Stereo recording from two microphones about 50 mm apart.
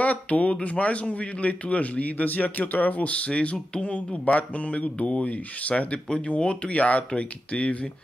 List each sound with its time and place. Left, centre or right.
0.0 s speech: left